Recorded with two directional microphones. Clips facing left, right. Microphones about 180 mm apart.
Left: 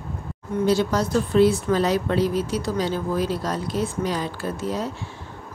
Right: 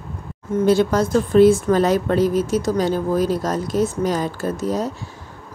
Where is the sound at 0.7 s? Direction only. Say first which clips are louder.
Right 5 dB; 50° right (ahead or behind).